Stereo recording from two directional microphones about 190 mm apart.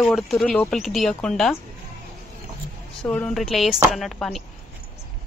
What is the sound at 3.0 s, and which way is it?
Speech, 5° left (ahead or behind).